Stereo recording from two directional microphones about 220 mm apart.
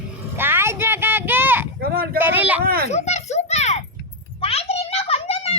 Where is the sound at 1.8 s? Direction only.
45° right (ahead or behind).